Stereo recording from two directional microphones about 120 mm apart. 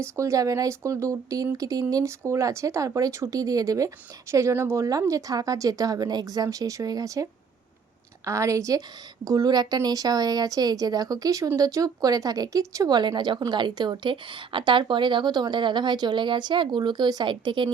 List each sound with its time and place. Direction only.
0.0 s speech: 25° right (ahead or behind); by 17.7 s 40° right (ahead or behind)